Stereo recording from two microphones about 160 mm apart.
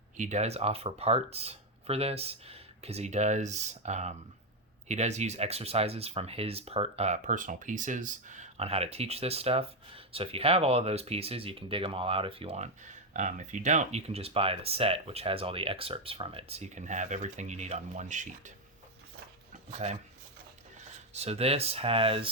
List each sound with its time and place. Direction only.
0.2 s speech: 45° right (ahead or behind)
19.8 s speech: 40° right (ahead or behind)
21.1 s speech: 40° right (ahead or behind)